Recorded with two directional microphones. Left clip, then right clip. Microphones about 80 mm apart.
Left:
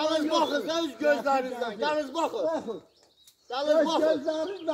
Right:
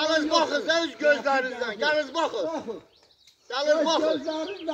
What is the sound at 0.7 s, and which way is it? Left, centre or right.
Speech, right.